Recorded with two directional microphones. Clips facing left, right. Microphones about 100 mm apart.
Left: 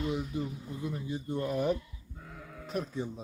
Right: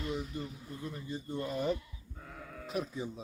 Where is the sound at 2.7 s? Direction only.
5° right (ahead or behind).